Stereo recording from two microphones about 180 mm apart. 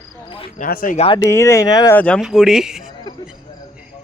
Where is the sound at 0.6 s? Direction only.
50° left (ahead or behind).